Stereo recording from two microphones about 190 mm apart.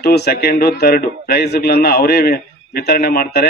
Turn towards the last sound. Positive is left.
turn(degrees=50)  # may be behind; listen again after turning